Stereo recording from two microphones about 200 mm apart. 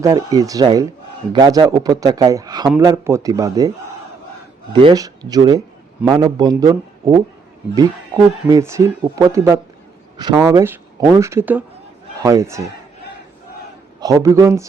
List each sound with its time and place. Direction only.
0.0 s speech: 15° right (ahead or behind)
4.7 s speech: 25° right (ahead or behind)
14.0 s speech: 15° right (ahead or behind)